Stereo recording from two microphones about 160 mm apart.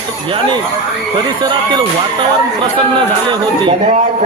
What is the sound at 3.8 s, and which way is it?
Speech, 60° right (ahead or behind).